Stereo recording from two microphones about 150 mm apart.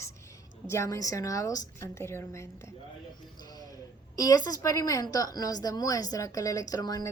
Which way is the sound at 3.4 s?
25° left (ahead or behind).